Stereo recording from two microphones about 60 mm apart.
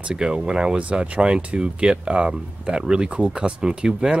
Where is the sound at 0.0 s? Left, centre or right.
Centre.